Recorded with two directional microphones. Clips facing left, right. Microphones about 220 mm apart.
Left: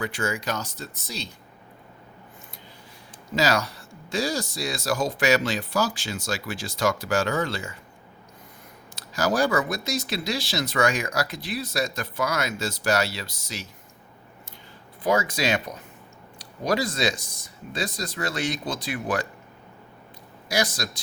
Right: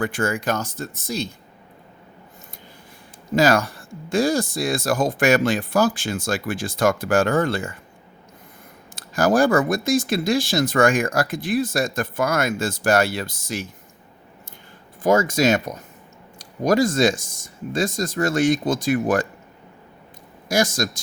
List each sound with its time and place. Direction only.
0.0 s speech: 50° right (ahead or behind)
3.3 s speech: 50° right (ahead or behind)
9.0 s speech: 50° right (ahead or behind)
15.0 s speech: 45° right (ahead or behind)
20.5 s speech: 45° right (ahead or behind)